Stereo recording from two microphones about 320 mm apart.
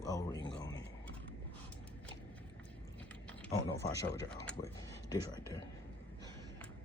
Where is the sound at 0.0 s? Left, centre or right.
Centre.